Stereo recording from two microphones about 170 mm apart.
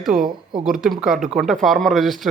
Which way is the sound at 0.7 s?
Centre (ahead or behind).